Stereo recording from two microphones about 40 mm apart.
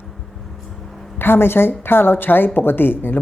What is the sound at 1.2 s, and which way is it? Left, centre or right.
A woman's voice, left.